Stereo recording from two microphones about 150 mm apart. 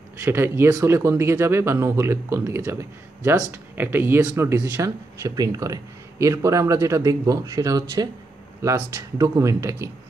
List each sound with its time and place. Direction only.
0.2 s speech: 15° right (ahead or behind)